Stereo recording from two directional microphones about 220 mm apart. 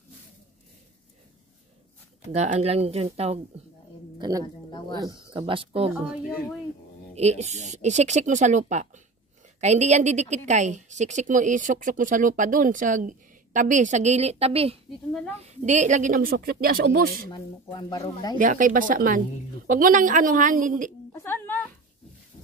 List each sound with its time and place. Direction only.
2.3 s speech: 30° right (ahead or behind)
4.2 s a woman's voice: 15° right (ahead or behind)
4.6 s speech: 20° left (ahead or behind)
5.0 s speech: 20° right (ahead or behind)
5.9 s speech: centre (ahead or behind)
7.2 s a woman's voice: 30° right (ahead or behind)
17.3 s speech: 20° left (ahead or behind)
18.4 s a woman's voice: 35° right (ahead or behind)
21.1 s a sound: 10° left (ahead or behind)